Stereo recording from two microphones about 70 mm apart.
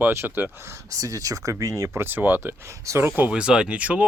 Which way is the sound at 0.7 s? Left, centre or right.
Right.